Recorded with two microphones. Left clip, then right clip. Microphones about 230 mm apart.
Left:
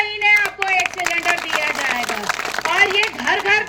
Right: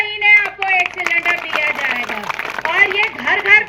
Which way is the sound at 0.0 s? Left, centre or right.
Left.